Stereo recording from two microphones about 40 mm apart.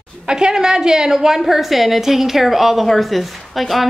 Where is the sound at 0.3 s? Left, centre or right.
Centre.